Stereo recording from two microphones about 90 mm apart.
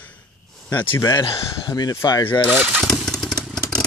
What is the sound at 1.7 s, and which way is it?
Speech, 50° left (ahead or behind).